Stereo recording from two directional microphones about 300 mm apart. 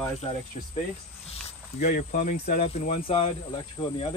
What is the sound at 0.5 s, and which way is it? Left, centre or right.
Speech, centre.